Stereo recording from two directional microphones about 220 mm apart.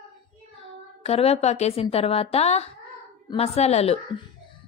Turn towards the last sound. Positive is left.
turn(degrees=30)  # may be behind; listen again after turning